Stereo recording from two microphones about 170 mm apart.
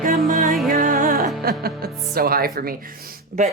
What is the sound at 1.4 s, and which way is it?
Speech, 65° right (ahead or behind).